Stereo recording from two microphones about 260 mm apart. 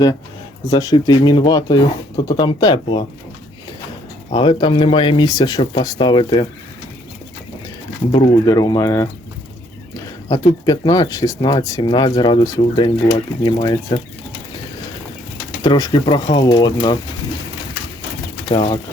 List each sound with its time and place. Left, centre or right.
0.7 s speech: centre
4.3 s speech: centre
8.1 s speech: centre
10.2 s speech: centre
15.6 s speech: centre
18.4 s speech: centre